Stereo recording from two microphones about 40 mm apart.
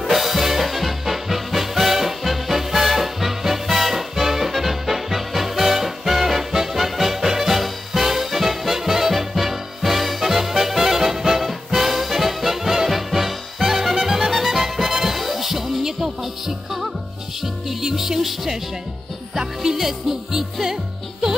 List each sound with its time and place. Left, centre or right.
0.0 s music: centre